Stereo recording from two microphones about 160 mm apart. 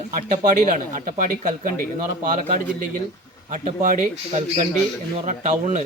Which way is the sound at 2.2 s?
55° right (ahead or behind).